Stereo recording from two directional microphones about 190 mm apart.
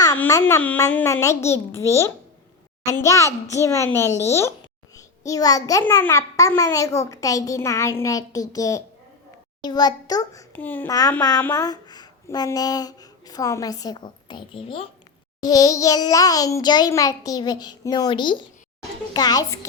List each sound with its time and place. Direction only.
0.2 s a child's voice: 15° left (ahead or behind)
10.5 s a child's voice: 10° left (ahead or behind)